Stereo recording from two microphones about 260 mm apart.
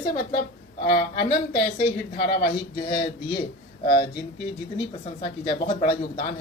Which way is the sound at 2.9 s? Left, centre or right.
Centre.